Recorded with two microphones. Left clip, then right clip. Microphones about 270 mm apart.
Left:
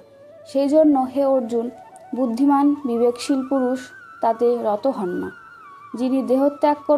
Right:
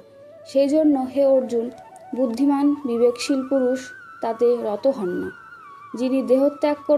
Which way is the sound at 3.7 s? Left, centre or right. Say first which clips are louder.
Right 1 dB; left.